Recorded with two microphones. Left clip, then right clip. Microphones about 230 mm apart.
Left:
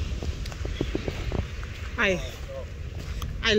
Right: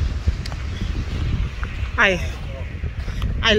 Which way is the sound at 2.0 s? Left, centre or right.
Centre.